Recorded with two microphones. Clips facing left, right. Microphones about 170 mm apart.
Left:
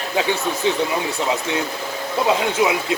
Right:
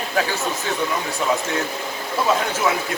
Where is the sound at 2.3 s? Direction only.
15° left (ahead or behind).